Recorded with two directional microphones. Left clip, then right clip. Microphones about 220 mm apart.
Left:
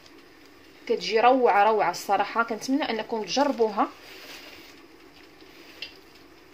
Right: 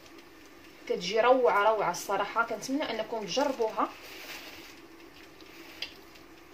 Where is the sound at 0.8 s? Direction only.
45° left (ahead or behind).